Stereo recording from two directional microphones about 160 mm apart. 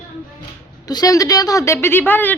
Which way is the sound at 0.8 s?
25° left (ahead or behind).